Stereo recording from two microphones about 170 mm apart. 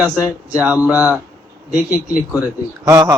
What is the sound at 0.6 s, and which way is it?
Speech, 10° right (ahead or behind).